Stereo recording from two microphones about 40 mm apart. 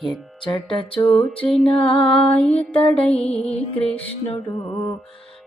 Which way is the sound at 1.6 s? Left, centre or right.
Left.